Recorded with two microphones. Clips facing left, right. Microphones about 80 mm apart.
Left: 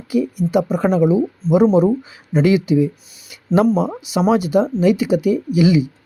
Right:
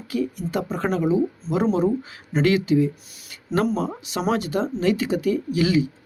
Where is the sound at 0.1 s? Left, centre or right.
Centre.